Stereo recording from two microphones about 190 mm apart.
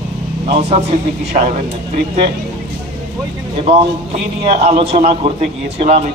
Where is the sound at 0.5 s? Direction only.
35° right (ahead or behind).